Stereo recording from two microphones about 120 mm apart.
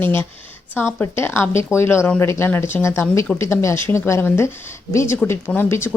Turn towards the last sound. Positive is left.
turn(degrees=20)  # may be behind; listen again after turning